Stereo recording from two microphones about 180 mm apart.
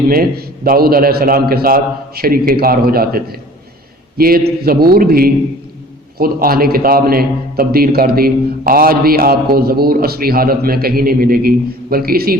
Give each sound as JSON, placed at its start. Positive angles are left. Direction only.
{"t": 0.1, "sound": "a man's voice", "side_deg": -55}